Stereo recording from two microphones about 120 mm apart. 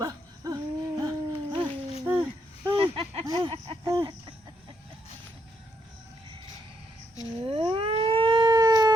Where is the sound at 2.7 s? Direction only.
50° right (ahead or behind).